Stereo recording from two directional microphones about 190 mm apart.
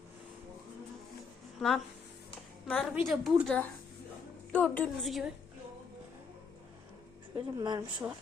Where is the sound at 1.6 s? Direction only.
Centre (ahead or behind).